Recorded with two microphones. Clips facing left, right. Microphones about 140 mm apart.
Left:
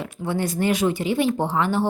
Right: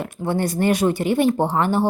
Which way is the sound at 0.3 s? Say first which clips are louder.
Right 3 dB; 50° right (ahead or behind).